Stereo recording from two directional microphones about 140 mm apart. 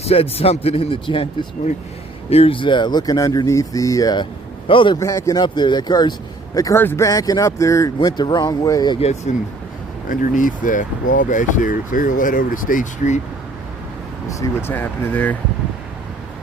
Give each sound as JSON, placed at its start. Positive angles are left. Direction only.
{"t": 0.0, "sound": "speech", "side_deg": 45}
{"t": 4.9, "sound": "speech", "side_deg": 20}
{"t": 9.0, "sound": "speech", "side_deg": 50}
{"t": 10.1, "sound": "speech", "side_deg": 70}
{"t": 14.3, "sound": "speech", "side_deg": 20}